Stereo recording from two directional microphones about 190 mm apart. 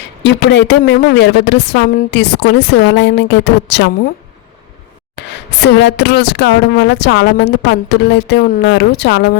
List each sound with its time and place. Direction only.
0.2 s a woman's voice: 65° left (ahead or behind)
5.1 s a woman's voice: 65° left (ahead or behind)